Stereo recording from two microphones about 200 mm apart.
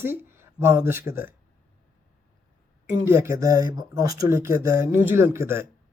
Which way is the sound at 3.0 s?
15° right (ahead or behind).